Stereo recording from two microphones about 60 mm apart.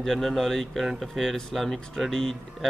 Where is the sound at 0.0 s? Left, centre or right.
Centre.